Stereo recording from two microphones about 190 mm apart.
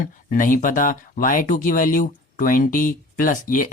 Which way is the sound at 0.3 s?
45° left (ahead or behind).